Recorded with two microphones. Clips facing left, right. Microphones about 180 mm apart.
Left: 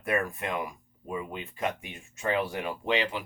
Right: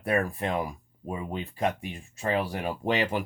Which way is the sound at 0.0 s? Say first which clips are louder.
Right 3 dB; 35° right (ahead or behind).